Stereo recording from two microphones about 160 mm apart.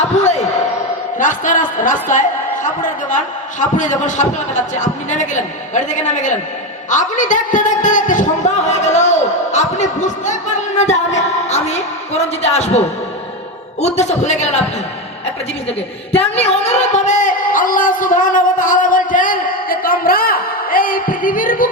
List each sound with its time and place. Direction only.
1.2 s a man's voice: 55° left (ahead or behind)
13.8 s a man's voice: 45° left (ahead or behind)
16.3 s a woman's voice: 40° left (ahead or behind); by 21.7 s 60° left (ahead or behind)